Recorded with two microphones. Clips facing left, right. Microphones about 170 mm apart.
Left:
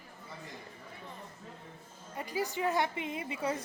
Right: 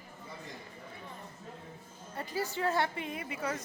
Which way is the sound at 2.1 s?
15° left (ahead or behind).